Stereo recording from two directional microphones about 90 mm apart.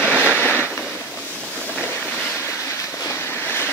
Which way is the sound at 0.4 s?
15° left (ahead or behind).